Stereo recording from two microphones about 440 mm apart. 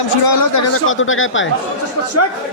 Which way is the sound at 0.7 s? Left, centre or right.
Left.